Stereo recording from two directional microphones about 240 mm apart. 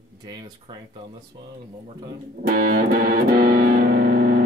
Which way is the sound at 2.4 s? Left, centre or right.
Right.